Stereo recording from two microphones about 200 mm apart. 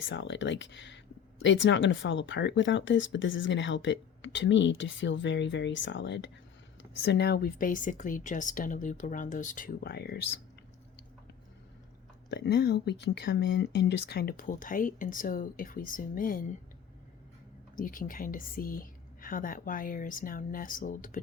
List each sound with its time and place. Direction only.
0.1 s speech: 65° left (ahead or behind)
12.3 s speech: 55° left (ahead or behind)
17.7 s speech: 45° left (ahead or behind)